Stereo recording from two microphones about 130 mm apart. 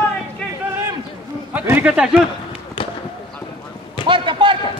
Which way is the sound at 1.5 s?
10° right (ahead or behind).